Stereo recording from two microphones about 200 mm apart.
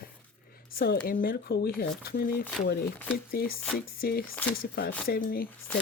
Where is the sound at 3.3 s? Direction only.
45° left (ahead or behind).